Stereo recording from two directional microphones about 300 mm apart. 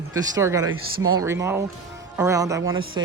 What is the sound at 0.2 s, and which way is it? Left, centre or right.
Speech, centre.